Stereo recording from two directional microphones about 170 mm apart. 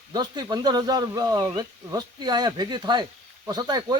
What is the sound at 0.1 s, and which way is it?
Speech, 25° right (ahead or behind).